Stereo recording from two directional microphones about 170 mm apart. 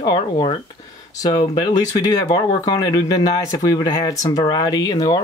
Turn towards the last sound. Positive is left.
turn(degrees=25)  # may be behind; listen again after turning